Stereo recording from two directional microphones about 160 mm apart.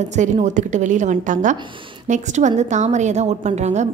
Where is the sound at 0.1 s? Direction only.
50° right (ahead or behind).